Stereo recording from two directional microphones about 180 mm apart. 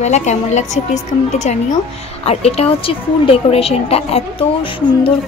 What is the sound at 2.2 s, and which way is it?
Speech, 35° left (ahead or behind).